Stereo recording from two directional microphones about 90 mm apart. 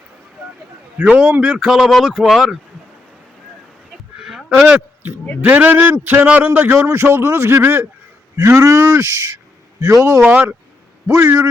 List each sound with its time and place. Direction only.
0.9 s a man's voice: 15° right (ahead or behind)
4.2 s a sound: 5° right (ahead or behind)
5.4 s a man's voice: 20° right (ahead or behind)
10.2 s a man's voice: 15° right (ahead or behind)